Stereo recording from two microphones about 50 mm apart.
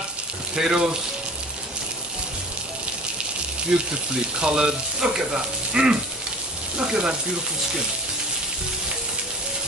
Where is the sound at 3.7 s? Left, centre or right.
Centre.